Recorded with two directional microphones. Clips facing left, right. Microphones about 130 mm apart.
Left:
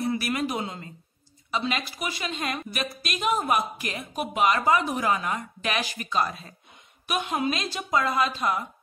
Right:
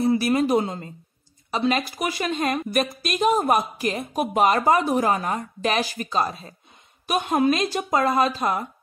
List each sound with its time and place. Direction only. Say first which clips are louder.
0.0 s a woman's voice: right 7 dB; 30° right (ahead or behind)